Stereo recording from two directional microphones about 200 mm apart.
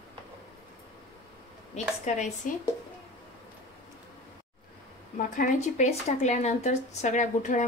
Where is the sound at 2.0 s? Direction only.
35° left (ahead or behind).